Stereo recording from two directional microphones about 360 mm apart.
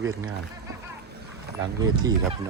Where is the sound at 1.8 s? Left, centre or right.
Centre.